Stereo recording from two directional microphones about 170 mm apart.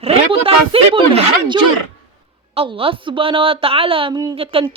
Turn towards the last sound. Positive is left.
turn(degrees=-30)  # may be behind; listen again after turning